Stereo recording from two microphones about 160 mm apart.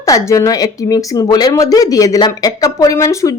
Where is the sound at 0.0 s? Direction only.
20° left (ahead or behind).